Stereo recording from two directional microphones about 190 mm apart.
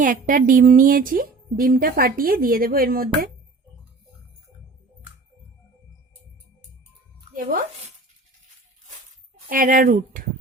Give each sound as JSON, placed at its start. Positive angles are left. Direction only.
{"t": 0.0, "sound": "a woman's voice", "side_deg": -45}
{"t": 7.3, "sound": "speech", "side_deg": -45}
{"t": 9.5, "sound": "a woman's voice", "side_deg": -45}